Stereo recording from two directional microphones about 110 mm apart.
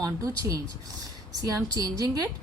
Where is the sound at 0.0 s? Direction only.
30° right (ahead or behind).